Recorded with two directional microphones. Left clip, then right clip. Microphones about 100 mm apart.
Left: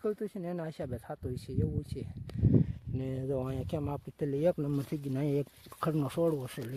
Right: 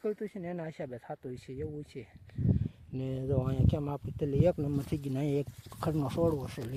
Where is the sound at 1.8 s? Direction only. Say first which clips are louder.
Left 2 dB; 30° left (ahead or behind).